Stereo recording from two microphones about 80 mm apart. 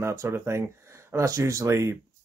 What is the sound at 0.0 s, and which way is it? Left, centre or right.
Speech, right.